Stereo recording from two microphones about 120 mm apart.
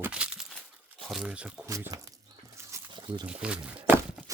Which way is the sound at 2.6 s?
25° right (ahead or behind).